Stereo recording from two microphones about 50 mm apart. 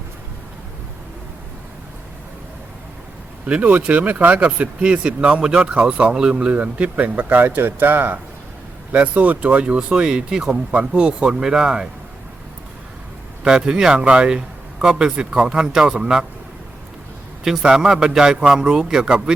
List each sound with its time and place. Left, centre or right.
3.4 s speech: right
4.4 s speech: right
6.5 s speech: right
7.2 s a man's voice: right; by 11.9 s centre
13.4 s a man's voice: centre
17.6 s a man's voice: centre